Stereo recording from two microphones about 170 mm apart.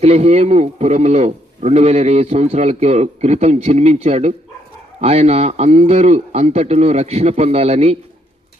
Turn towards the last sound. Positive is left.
turn(degrees=-40)  # may be behind; listen again after turning